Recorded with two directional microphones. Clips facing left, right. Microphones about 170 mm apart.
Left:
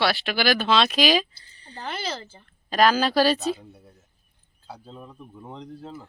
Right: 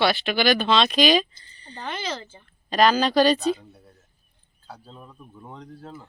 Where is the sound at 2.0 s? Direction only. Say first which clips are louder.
Right 1 dB; 35° left (ahead or behind).